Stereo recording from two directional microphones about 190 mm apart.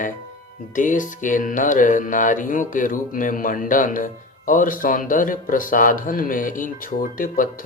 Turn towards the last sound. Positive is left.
turn(degrees=50)  # may be behind; listen again after turning